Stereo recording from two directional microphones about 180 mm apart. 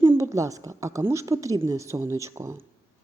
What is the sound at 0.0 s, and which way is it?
Speech, 15° right (ahead or behind).